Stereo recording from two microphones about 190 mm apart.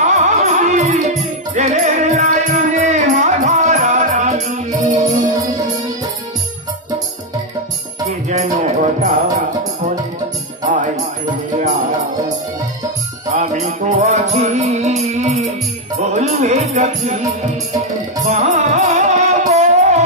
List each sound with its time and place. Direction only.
0.0 s music: 40° right (ahead or behind)
8.3 s music: 40° right (ahead or behind)
10.6 s music: 45° right (ahead or behind)
13.3 s music: 40° right (ahead or behind)
18.2 s music: 40° right (ahead or behind)